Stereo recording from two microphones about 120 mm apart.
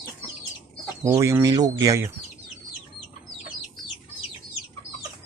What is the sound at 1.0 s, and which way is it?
Speech, 25° right (ahead or behind).